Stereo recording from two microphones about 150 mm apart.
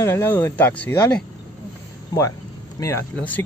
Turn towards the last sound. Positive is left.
turn(degrees=15)  # may be behind; listen again after turning